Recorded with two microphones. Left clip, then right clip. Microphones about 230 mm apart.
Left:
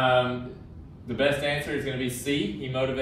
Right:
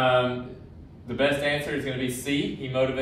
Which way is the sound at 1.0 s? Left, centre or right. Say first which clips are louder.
Right 1 dB; centre.